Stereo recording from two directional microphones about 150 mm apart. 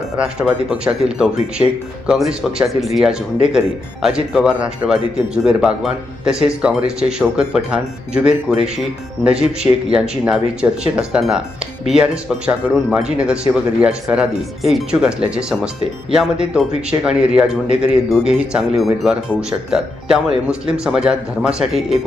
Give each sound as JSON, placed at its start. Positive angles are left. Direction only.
{"t": 0.2, "sound": "speech", "side_deg": -5}